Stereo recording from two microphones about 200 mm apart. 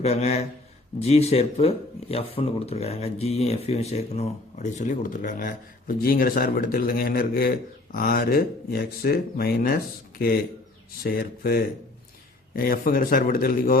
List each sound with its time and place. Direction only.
0.0 s speech: 30° left (ahead or behind)